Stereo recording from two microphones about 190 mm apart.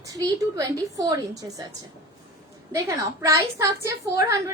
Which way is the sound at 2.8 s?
15° right (ahead or behind).